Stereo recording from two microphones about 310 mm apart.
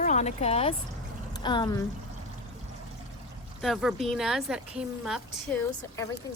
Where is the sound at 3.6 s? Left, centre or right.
Centre.